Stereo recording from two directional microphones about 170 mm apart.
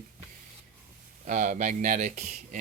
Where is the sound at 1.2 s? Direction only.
45° right (ahead or behind).